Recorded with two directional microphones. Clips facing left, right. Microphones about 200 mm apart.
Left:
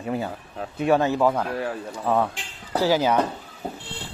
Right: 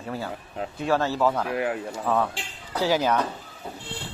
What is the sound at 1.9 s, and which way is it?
A man's voice, 15° left (ahead or behind).